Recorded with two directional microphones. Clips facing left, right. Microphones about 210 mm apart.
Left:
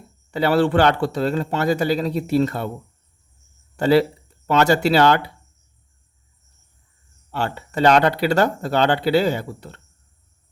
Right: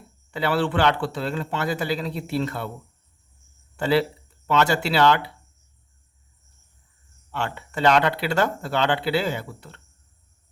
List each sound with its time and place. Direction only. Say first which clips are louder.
0.3 s speech: left 6 dB; 40° left (ahead or behind)
3.8 s speech: left 5 dB; 40° left (ahead or behind)
7.3 s speech: left 4 dB; 35° left (ahead or behind)